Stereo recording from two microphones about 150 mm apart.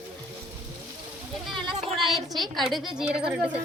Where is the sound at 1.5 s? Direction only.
35° right (ahead or behind).